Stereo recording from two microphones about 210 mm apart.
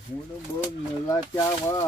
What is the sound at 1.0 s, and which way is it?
Speech, 20° left (ahead or behind).